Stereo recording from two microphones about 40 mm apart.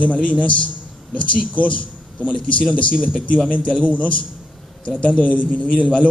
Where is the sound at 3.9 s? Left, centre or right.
Left.